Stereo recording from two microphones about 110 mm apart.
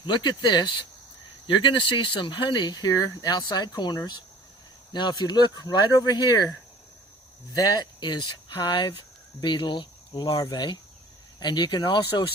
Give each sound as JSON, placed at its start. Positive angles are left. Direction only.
{"t": 0.0, "sound": "speech", "side_deg": 45}
{"t": 7.5, "sound": "speech", "side_deg": 40}
{"t": 10.3, "sound": "speech", "side_deg": 35}